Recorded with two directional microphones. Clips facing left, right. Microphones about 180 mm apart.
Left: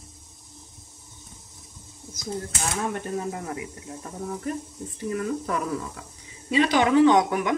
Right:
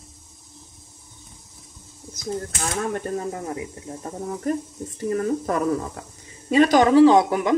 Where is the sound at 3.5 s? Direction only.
30° right (ahead or behind).